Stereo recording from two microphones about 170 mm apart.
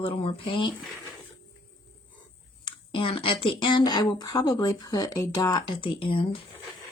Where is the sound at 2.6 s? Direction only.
30° left (ahead or behind).